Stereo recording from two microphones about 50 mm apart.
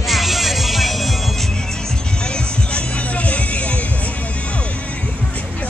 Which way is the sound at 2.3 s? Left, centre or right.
Left.